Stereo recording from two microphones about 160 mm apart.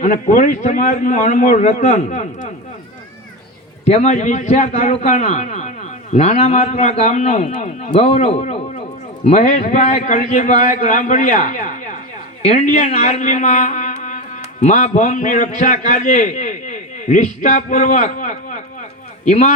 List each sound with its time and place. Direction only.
0.0 s a man's voice: 55° left (ahead or behind)
3.8 s a man's voice: 45° left (ahead or behind)